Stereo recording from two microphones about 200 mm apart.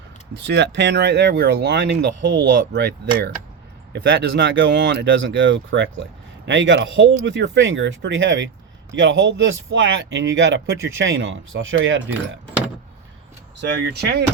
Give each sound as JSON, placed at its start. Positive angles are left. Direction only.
{"t": 0.3, "sound": "speech", "side_deg": -60}
{"t": 13.6, "sound": "speech", "side_deg": -55}